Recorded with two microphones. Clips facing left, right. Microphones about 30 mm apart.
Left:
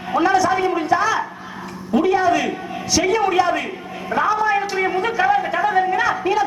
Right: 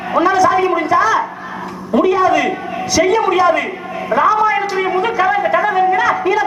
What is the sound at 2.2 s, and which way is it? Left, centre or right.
A man's voice, right.